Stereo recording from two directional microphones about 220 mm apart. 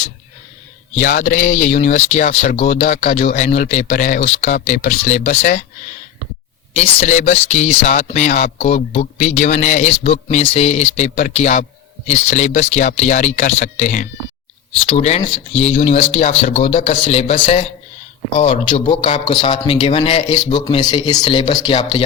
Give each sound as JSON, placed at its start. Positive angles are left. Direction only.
{"t": 0.9, "sound": "speech", "side_deg": 35}
{"t": 7.0, "sound": "a man's voice", "side_deg": 30}